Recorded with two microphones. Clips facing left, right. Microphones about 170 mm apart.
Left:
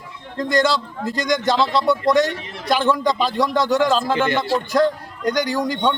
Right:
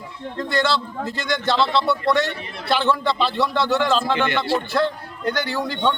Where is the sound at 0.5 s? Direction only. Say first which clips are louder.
Left 3 dB; 45° left (ahead or behind).